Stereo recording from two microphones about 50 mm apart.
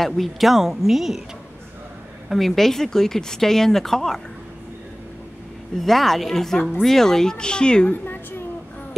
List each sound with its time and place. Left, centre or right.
0.0 s speech: centre
2.2 s speech: centre
5.8 s speech: centre
7.9 s a sound: left